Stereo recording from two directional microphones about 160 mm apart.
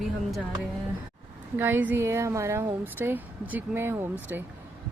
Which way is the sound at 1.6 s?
10° right (ahead or behind).